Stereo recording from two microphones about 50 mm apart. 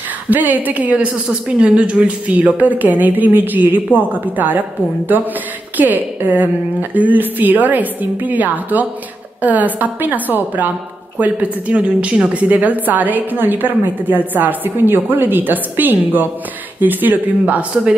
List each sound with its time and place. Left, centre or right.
0.3 s a woman's voice: right
1.1 s a woman's voice: centre
12.4 s a woman's voice: right